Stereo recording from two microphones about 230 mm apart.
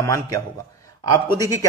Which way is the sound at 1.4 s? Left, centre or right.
Centre.